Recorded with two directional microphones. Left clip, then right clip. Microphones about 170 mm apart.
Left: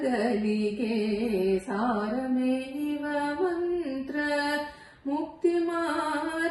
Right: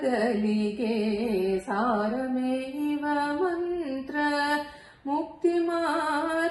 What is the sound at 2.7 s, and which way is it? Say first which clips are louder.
Mantra: right 2 dB; 30° right (ahead or behind).